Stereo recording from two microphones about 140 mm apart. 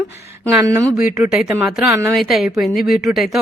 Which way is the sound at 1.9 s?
20° right (ahead or behind).